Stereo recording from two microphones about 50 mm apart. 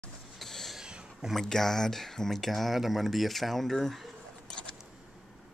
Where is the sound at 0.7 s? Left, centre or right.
Centre.